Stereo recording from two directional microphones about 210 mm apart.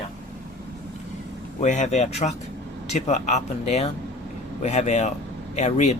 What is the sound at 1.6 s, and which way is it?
Speech, 35° left (ahead or behind).